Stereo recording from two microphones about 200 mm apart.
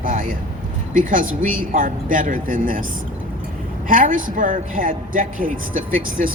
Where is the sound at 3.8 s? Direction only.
40° right (ahead or behind).